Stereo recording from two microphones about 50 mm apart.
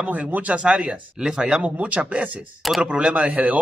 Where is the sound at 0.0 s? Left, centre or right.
Right.